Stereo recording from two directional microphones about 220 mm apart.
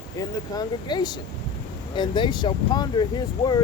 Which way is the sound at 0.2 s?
20° left (ahead or behind).